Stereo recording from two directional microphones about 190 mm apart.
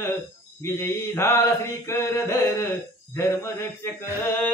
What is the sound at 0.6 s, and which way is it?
Speech, 15° left (ahead or behind).